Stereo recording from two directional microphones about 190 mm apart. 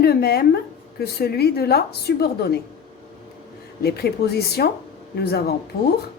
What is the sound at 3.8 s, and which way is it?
Speech, 55° left (ahead or behind).